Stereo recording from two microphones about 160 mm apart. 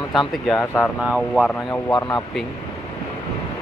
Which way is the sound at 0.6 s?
15° left (ahead or behind).